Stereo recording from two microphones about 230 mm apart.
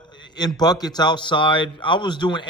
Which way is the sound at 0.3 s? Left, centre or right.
Centre.